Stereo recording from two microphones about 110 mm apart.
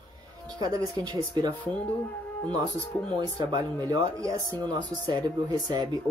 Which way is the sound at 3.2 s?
35° right (ahead or behind).